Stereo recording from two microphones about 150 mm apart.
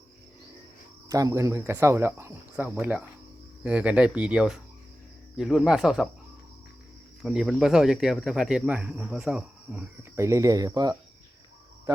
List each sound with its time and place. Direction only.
1.0 s speech: 25° right (ahead or behind); by 6.1 s centre (ahead or behind)
7.2 s speech: centre (ahead or behind)
10.2 s speech: 20° right (ahead or behind)